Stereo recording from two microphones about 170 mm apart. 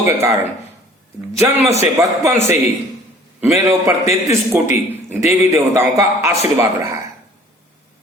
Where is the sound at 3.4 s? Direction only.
20° right (ahead or behind).